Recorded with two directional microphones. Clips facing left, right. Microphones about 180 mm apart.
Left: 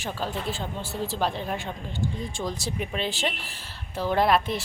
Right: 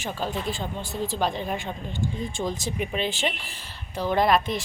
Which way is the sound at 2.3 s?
20° right (ahead or behind).